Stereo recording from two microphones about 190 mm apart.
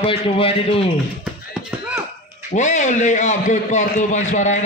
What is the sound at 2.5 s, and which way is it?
A man's voice, 40° left (ahead or behind).